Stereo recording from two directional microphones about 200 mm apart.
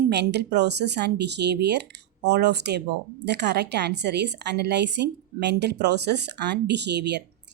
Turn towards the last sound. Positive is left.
turn(degrees=-60)  # may be behind; listen again after turning